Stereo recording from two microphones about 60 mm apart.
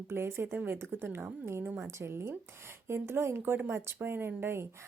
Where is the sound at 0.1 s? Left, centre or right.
Right.